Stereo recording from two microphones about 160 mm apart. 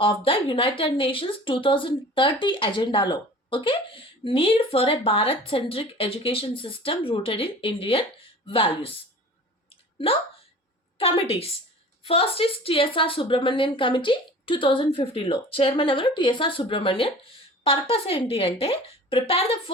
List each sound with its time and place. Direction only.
0.0 s speech: 35° left (ahead or behind)
9.6 s clicking: 35° left (ahead or behind)
10.9 s speech: 35° left (ahead or behind)